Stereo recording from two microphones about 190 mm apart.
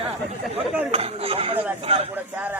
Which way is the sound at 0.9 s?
30° right (ahead or behind).